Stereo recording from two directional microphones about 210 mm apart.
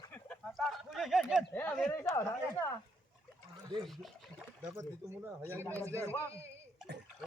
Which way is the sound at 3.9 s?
Centre (ahead or behind).